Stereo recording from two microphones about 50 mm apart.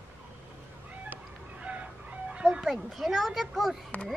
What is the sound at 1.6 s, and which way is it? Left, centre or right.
Chicken, right.